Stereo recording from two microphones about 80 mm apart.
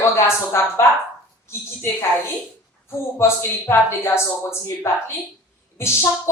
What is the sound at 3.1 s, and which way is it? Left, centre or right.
Speech, left.